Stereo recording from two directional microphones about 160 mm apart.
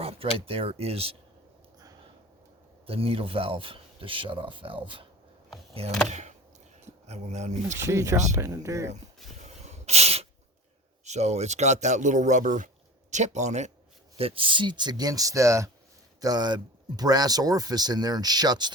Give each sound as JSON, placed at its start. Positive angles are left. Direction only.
{"t": 0.0, "sound": "speech", "side_deg": -35}
{"t": 2.8, "sound": "speech", "side_deg": -35}
{"t": 6.1, "sound": "a sound", "side_deg": -45}
{"t": 6.8, "sound": "speech", "side_deg": -45}
{"t": 7.8, "sound": "speech", "side_deg": -20}
{"t": 9.4, "sound": "a sound", "side_deg": -45}
{"t": 11.0, "sound": "speech", "side_deg": -45}
{"t": 14.2, "sound": "speech", "side_deg": -35}